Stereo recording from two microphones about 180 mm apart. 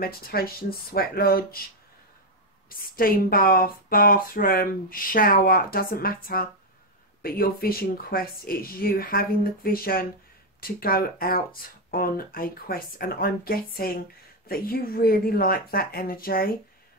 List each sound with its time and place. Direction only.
0.0 s speech: 55° left (ahead or behind)
2.7 s speech: 55° left (ahead or behind)